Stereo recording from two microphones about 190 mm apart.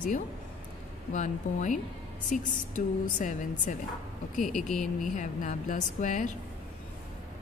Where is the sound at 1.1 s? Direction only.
40° left (ahead or behind).